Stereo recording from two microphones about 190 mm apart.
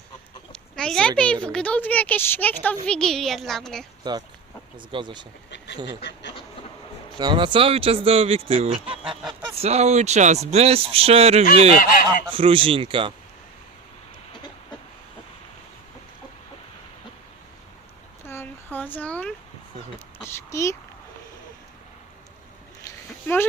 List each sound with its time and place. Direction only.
0.8 s speech: 5° left (ahead or behind)
4.0 s speech: 20° right (ahead or behind)
5.5 s quack: 70° left (ahead or behind)
7.2 s speech: 25° right (ahead or behind)
11.8 s goose: 45° left (ahead or behind)
12.3 s speech: 30° right (ahead or behind)
18.3 s a sound: 10° left (ahead or behind)
20.3 s speech: 15° left (ahead or behind)
23.2 s speech: 10° left (ahead or behind)